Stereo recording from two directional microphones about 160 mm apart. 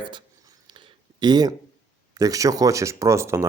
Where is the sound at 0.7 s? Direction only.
30° right (ahead or behind).